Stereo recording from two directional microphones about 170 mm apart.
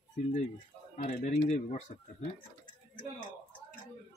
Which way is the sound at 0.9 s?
45° left (ahead or behind).